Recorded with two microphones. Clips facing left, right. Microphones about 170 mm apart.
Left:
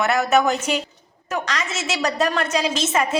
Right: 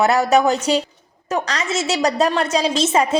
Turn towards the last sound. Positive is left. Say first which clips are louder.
# right 4 dB
turn(degrees=-35)  # may be behind; listen again after turning